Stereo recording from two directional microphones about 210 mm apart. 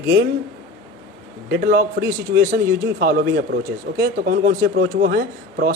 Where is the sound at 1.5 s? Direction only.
45° right (ahead or behind).